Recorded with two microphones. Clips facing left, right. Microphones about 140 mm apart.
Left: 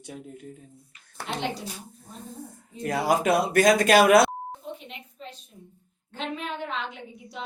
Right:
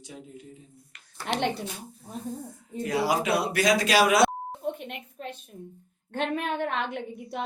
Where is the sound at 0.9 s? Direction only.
80° right.